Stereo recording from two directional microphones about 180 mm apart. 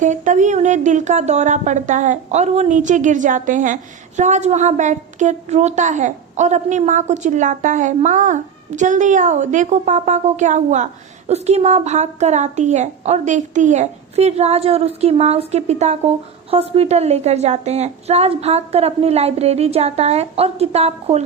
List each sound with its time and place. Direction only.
0.0 s a woman's voice: 45° right (ahead or behind)